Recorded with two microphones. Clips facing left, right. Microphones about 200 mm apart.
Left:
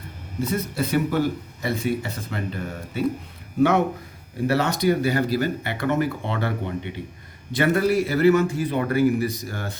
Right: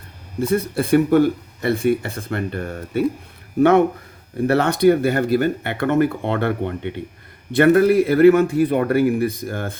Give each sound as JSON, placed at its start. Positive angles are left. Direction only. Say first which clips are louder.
{"t": 0.4, "sound": "speech", "louder": "right 6 dB", "side_deg": -55}